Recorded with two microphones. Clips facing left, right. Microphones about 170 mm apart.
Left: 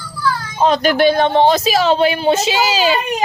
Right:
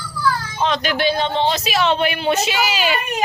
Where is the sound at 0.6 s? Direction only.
40° left (ahead or behind).